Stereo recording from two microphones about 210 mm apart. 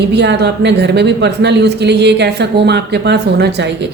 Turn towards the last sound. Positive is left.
turn(degrees=-50)  # may be behind; listen again after turning